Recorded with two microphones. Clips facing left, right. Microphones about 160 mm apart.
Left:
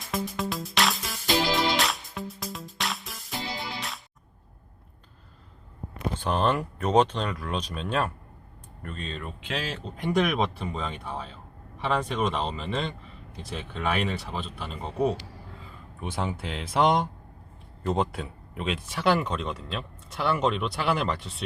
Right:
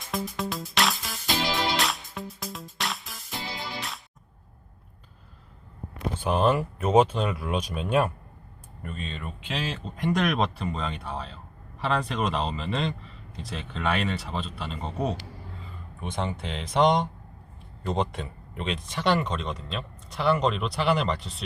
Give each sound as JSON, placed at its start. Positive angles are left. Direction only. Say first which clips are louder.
{"t": 0.1, "sound": "music", "louder": "left 1 dB", "side_deg": 0}
{"t": 6.1, "sound": "speech", "louder": "right 2 dB", "side_deg": -5}